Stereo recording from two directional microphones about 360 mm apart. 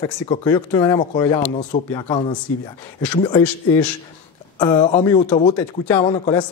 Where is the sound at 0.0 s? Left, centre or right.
Centre.